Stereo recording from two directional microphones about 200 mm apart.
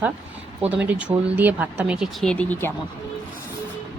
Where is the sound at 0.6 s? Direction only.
5° right (ahead or behind); by 2.7 s 10° left (ahead or behind).